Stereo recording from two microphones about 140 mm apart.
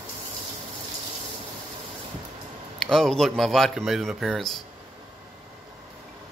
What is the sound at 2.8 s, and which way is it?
Speech, 5° left (ahead or behind).